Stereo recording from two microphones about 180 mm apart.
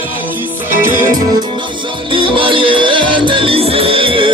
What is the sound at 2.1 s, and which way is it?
Music, 30° right (ahead or behind).